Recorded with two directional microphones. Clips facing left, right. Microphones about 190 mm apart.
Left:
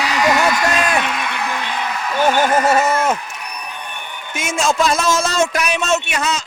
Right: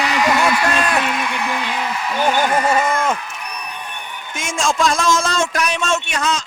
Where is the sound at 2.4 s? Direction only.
40° left (ahead or behind).